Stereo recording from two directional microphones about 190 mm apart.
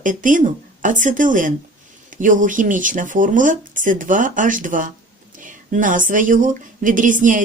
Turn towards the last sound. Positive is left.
turn(degrees=-45)  # may be behind; listen again after turning